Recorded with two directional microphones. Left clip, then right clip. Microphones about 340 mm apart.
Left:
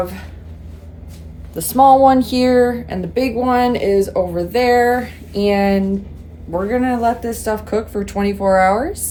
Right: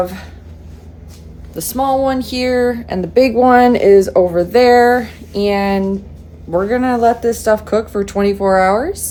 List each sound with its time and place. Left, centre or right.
0.0 s speech: centre
1.5 s speech: centre